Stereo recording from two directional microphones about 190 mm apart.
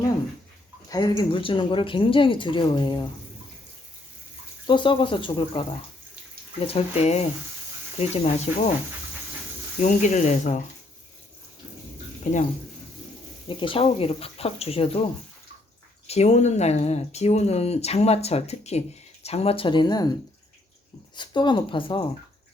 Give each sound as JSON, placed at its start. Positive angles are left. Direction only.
{"t": 0.9, "sound": "speech", "side_deg": 20}
{"t": 4.6, "sound": "speech", "side_deg": 25}
{"t": 9.8, "sound": "speech", "side_deg": 40}
{"t": 13.5, "sound": "speech", "side_deg": 25}
{"t": 16.0, "sound": "speech", "side_deg": 35}
{"t": 21.2, "sound": "speech", "side_deg": 25}